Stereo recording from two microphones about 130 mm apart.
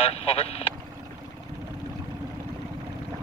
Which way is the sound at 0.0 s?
50° left (ahead or behind).